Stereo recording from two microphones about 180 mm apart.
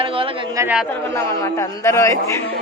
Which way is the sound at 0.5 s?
15° right (ahead or behind).